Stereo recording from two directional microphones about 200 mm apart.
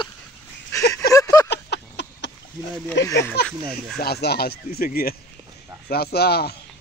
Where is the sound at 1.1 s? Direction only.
15° left (ahead or behind).